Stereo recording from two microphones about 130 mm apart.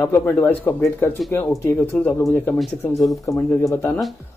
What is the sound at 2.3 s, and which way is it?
Speech, 15° left (ahead or behind).